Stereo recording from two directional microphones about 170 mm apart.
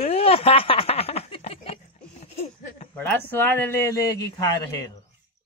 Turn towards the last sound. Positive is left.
turn(degrees=20)  # may be behind; listen again after turning